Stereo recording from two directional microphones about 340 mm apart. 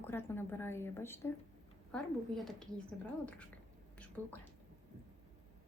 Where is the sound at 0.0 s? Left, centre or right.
Centre.